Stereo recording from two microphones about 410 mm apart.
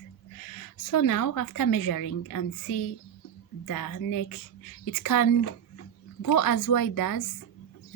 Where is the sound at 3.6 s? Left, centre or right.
Left.